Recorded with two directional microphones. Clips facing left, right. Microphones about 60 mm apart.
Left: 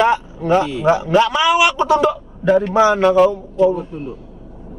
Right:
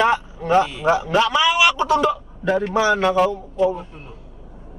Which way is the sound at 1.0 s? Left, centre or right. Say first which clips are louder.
Left 3 dB; centre.